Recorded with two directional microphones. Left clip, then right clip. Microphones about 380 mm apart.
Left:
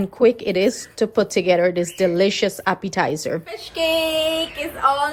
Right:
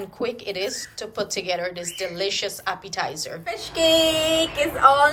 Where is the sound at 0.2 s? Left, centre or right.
Centre.